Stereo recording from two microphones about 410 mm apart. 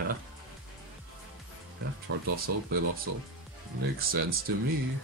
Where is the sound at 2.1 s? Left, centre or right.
Right.